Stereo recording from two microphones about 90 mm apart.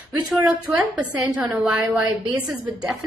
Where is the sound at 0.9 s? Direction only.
15° right (ahead or behind).